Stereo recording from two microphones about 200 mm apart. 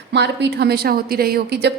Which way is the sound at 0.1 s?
60° right (ahead or behind).